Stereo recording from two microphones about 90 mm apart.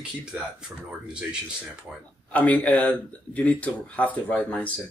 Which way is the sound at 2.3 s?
15° left (ahead or behind).